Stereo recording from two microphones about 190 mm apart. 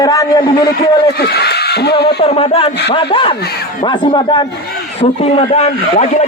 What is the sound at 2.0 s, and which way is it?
Speech, 35° left (ahead or behind).